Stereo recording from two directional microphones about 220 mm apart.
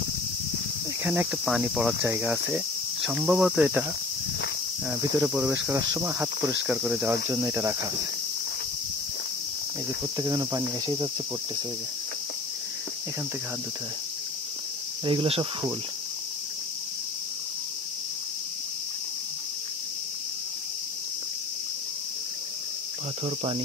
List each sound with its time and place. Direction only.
1.0 s cricket: 5° right (ahead or behind)
5.2 s cricket: 10° right (ahead or behind)
10.1 s cricket: 15° right (ahead or behind)
15.0 s speech: 25° right (ahead or behind)
23.2 s speech: 25° right (ahead or behind)